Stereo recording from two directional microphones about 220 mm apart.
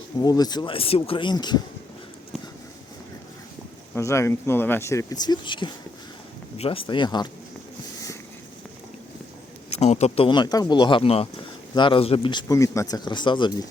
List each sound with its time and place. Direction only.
0.2 s speech: 15° left (ahead or behind)
3.9 s speech: 10° left (ahead or behind)
9.6 s speech: 30° left (ahead or behind)